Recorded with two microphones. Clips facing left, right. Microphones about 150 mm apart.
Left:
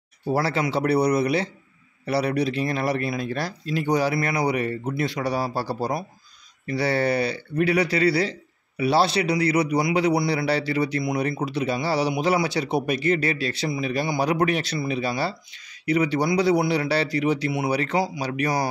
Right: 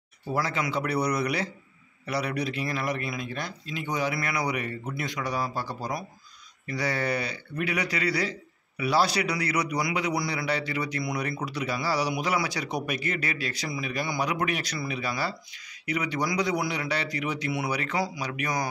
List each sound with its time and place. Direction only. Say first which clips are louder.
0.3 s speech: left 5 dB; 35° left (ahead or behind)